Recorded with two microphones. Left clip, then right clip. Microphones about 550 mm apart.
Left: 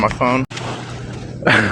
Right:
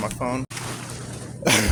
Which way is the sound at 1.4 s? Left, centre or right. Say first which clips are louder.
Left 7 dB; right.